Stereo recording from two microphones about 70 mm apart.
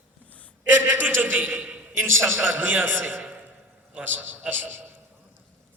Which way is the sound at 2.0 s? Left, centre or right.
Right.